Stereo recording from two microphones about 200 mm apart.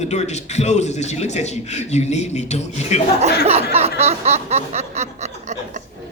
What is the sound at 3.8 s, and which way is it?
Snicker, 30° right (ahead or behind).